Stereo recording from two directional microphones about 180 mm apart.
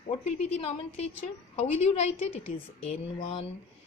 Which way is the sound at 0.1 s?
35° left (ahead or behind).